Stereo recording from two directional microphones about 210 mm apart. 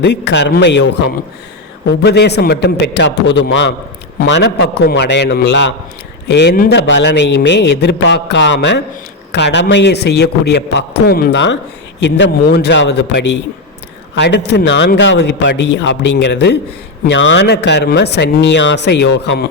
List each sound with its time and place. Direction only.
0.0 s a man's voice: 55° left (ahead or behind)